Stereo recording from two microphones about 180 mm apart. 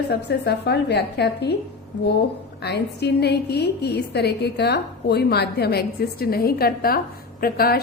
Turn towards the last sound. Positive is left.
turn(degrees=55)  # may be behind; listen again after turning